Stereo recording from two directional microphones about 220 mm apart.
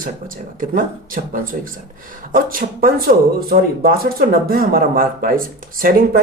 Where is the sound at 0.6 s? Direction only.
40° right (ahead or behind).